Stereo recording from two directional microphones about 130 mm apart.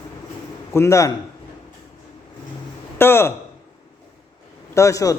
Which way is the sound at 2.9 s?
20° left (ahead or behind).